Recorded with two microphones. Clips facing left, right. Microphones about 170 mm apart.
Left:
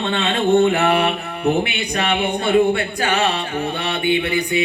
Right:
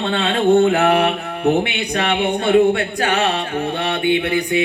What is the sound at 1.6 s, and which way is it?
Speech, 70° right (ahead or behind).